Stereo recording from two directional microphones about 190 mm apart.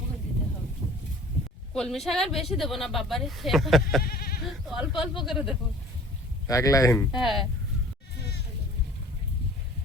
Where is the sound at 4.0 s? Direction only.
50° left (ahead or behind).